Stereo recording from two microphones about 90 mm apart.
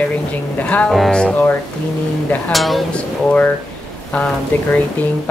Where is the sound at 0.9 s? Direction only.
5° left (ahead or behind).